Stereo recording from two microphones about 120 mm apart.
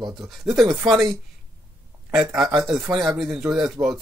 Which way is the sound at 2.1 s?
5° right (ahead or behind).